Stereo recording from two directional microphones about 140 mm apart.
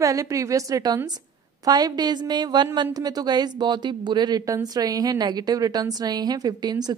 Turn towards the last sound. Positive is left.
turn(degrees=-30)  # may be behind; listen again after turning